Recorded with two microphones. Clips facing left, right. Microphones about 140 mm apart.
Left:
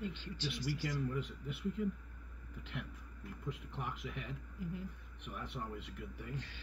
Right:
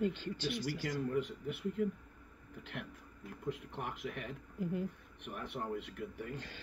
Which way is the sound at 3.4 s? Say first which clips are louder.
Right 4 dB; 55° right (ahead or behind).